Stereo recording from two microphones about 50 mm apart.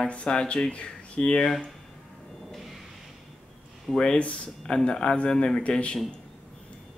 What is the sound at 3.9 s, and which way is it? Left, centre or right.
A man's voice, left.